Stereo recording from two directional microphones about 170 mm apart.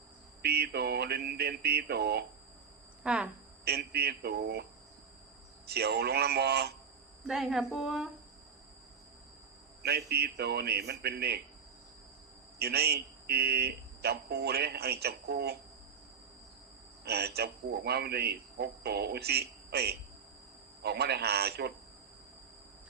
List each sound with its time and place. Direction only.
0.4 s speech: 70° right (ahead or behind)
3.0 s speech: 5° right (ahead or behind)
3.6 s speech: 70° right (ahead or behind)
5.6 s speech: 70° right (ahead or behind)
7.3 s speech: 5° right (ahead or behind)
9.8 s speech: 70° right (ahead or behind)
12.5 s speech: 70° right (ahead or behind)
17.0 s speech: 70° right (ahead or behind)